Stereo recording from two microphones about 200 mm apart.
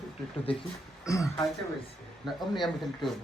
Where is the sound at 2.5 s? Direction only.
Centre (ahead or behind).